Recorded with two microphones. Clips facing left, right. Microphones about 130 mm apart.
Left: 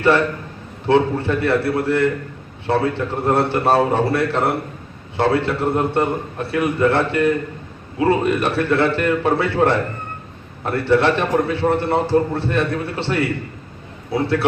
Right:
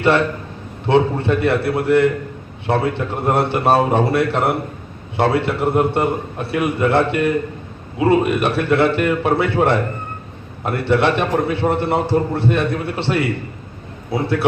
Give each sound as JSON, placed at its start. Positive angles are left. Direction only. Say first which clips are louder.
{"t": 0.0, "sound": "a man's voice", "louder": "even", "side_deg": -20}